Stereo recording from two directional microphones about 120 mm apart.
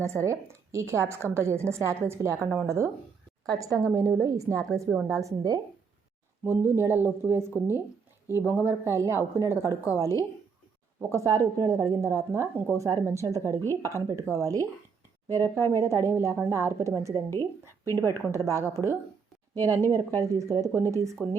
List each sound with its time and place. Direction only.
0.0 s a woman's voice: 25° right (ahead or behind)
6.4 s a woman's voice: 20° right (ahead or behind)
13.6 s speech: 20° left (ahead or behind)
13.9 s a woman's voice: 25° right (ahead or behind)
15.4 s speech: 20° left (ahead or behind)
15.7 s a woman's voice: 25° right (ahead or behind)
17.4 s speech: 25° left (ahead or behind)
18.1 s a woman's voice: 25° right (ahead or behind)
18.6 s speech: 25° left (ahead or behind)
20.3 s a woman's voice: 25° right (ahead or behind)